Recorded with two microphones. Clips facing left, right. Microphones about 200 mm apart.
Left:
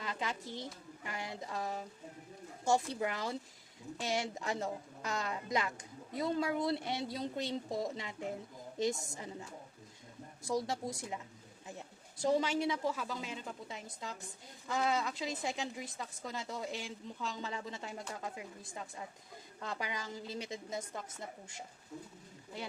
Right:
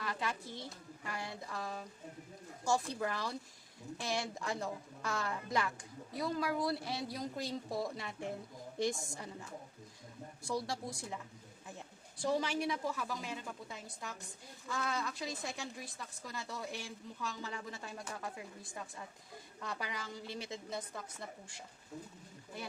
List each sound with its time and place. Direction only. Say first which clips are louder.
0.0 s speech: even; 20° left (ahead or behind)
10.4 s speech: left 3 dB; 20° left (ahead or behind)
12.2 s speech: left 3 dB; 20° left (ahead or behind)